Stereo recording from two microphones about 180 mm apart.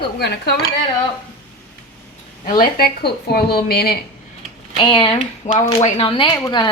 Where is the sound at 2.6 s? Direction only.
60° left (ahead or behind).